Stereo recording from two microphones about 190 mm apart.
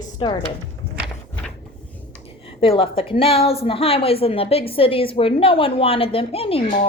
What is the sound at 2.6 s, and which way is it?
A woman's voice, 30° left (ahead or behind).